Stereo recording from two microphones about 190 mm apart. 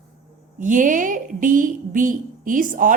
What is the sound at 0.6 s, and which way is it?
A woman's voice, 45° right (ahead or behind).